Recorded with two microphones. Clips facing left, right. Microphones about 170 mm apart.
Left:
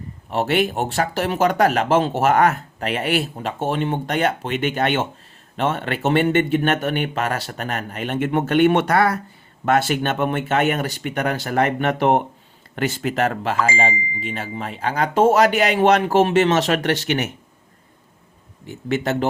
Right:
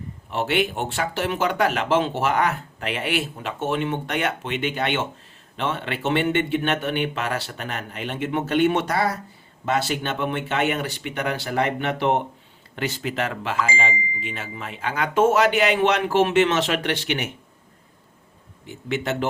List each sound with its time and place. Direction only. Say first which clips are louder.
0.3 s speech: left 3 dB; 40° left (ahead or behind)
18.9 s speech: left 4 dB; 45° left (ahead or behind)